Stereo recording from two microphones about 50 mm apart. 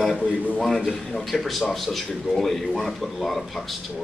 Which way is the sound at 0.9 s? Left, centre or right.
Centre.